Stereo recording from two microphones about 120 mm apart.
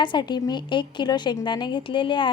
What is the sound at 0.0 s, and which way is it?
A woman's voice, 40° left (ahead or behind).